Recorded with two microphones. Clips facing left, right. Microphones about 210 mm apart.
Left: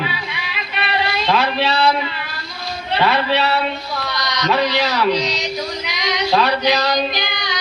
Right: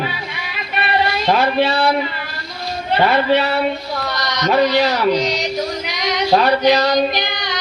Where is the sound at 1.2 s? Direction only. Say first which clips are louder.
Right 3 dB; 45° right (ahead or behind).